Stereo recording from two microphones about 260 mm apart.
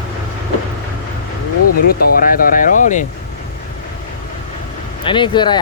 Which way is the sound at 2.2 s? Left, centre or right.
Left.